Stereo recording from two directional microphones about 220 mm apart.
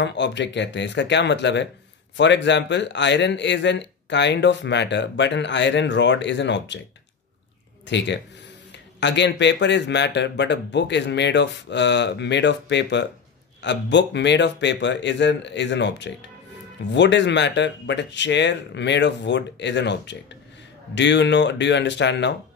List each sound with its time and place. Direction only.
0.0 s speech: 55° left (ahead or behind)
7.8 s speech: 55° left (ahead or behind)